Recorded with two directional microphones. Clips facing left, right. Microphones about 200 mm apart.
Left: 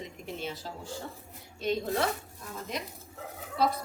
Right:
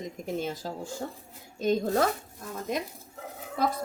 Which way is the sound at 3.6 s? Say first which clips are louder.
Even; 50° right (ahead or behind).